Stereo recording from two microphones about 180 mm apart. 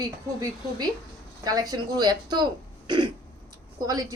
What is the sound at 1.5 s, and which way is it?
Speech, 20° right (ahead or behind).